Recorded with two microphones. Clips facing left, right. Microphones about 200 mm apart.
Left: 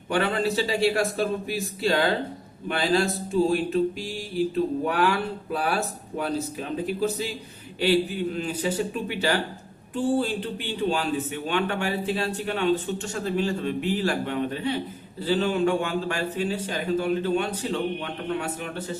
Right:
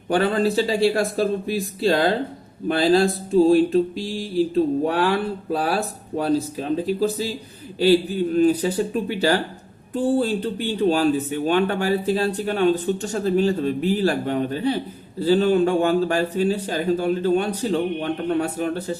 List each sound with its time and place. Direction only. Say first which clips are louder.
0.1 s speech: right 5 dB; 35° right (ahead or behind)
8.4 s speech: right 12 dB; 40° right (ahead or behind)